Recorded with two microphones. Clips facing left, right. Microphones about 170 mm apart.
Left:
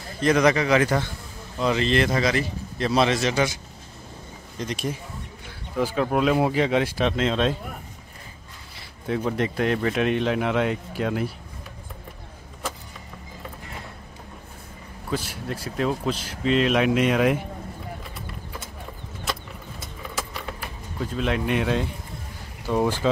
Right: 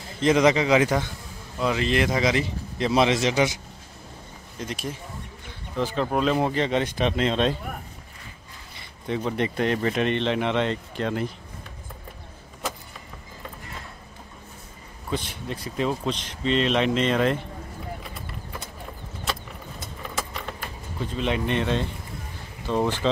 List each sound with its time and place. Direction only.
0.2 s a man's voice: 20° right (ahead or behind)
1.6 s speech: 5° right (ahead or behind)
4.6 s speech: 5° right (ahead or behind)
5.8 s speech: 5° left (ahead or behind)
8.7 s speech: 5° left (ahead or behind)
15.0 s speech: 5° left (ahead or behind)
19.8 s keys jangling: 5° left (ahead or behind)
22.7 s speech: 10° left (ahead or behind)